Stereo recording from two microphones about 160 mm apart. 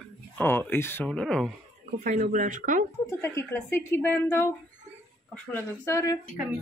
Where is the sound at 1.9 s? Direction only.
50° right (ahead or behind).